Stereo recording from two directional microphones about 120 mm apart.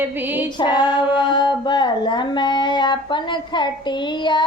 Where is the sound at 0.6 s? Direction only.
40° left (ahead or behind).